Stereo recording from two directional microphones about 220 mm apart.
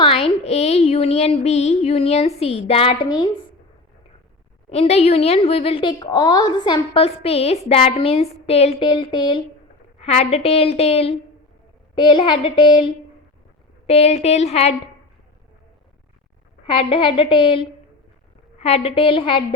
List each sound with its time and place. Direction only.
0.0 s a woman's voice: 25° left (ahead or behind)
4.7 s a woman's voice: 30° left (ahead or behind)
16.6 s a woman's voice: 25° left (ahead or behind)